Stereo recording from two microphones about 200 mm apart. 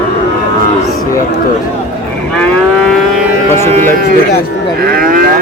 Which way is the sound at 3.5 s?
10° left (ahead or behind).